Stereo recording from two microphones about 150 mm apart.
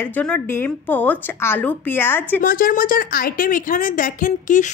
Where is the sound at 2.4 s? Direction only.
70° left (ahead or behind).